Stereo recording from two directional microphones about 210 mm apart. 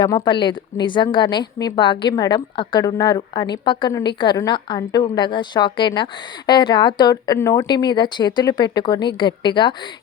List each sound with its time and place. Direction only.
0.0 s a woman's voice: 20° left (ahead or behind)